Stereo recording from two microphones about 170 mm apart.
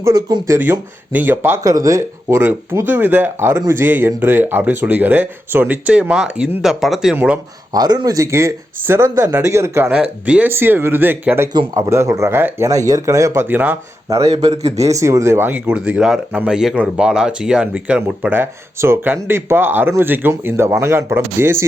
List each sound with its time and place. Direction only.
0.0 s speech: 20° right (ahead or behind); by 7.3 s 5° right (ahead or behind)
7.7 s speech: 20° right (ahead or behind)
11.5 s speech: 25° right (ahead or behind)